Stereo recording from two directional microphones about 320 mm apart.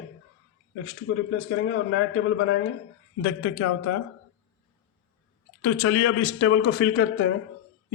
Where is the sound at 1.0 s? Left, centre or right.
Left.